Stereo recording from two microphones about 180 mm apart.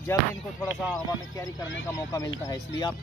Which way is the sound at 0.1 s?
15° left (ahead or behind).